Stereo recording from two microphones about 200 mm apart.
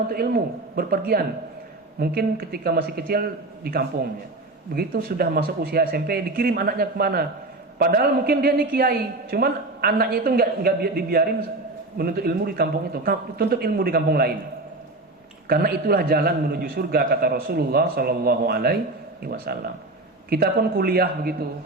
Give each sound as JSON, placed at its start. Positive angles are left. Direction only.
{"t": 0.1, "sound": "a woman's voice", "side_deg": -50}
{"t": 15.4, "sound": "a woman's voice", "side_deg": -50}